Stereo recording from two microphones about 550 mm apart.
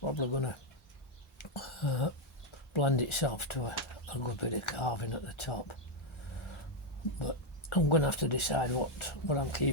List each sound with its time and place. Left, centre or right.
0.0 s speech: left
1.4 s throat clearing: left
2.7 s speech: left
7.7 s speech: left